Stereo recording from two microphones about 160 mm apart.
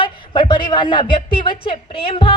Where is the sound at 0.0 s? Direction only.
30° left (ahead or behind).